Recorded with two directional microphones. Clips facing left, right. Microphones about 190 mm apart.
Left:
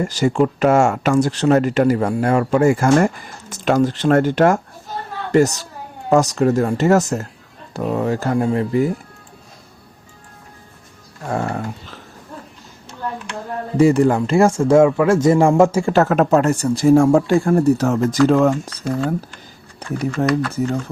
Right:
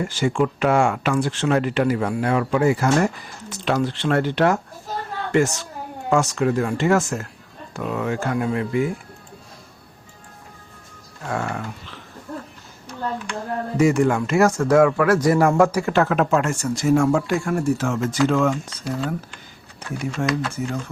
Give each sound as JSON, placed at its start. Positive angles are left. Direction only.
{"t": 0.0, "sound": "speech", "side_deg": 40}
{"t": 11.3, "sound": "speech", "side_deg": 35}
{"t": 13.7, "sound": "speech", "side_deg": 35}
{"t": 15.9, "sound": "speech", "side_deg": 40}
{"t": 20.5, "sound": "speech", "side_deg": 35}